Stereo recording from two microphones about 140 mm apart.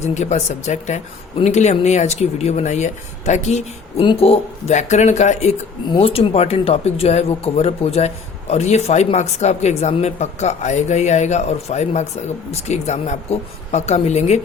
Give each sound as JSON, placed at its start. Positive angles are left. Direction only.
{"t": 0.1, "sound": "speech", "side_deg": 55}
{"t": 4.0, "sound": "speech", "side_deg": 40}
{"t": 6.0, "sound": "speech", "side_deg": 45}